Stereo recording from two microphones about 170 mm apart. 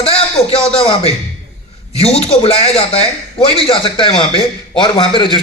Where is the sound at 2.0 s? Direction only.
35° left (ahead or behind).